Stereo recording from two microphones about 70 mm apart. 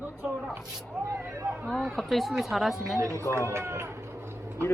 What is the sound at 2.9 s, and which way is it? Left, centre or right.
Speech, right.